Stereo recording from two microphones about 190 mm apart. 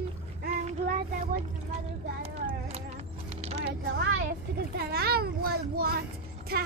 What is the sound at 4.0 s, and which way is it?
Children playing, 65° right (ahead or behind).